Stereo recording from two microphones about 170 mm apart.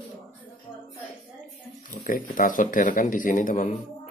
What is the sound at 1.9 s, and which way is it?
Speech, 50° left (ahead or behind).